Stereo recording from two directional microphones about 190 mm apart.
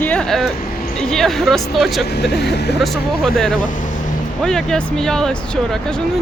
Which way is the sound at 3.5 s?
45° left (ahead or behind).